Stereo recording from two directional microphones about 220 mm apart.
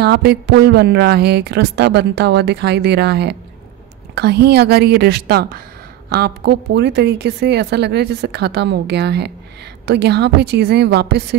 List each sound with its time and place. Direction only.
0.0 s a woman's voice: 50° right (ahead or behind)